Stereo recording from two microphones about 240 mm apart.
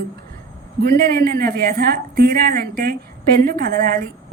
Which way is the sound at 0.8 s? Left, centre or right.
Right.